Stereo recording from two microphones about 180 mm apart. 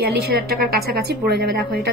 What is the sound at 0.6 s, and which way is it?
A woman's voice, 60° right (ahead or behind).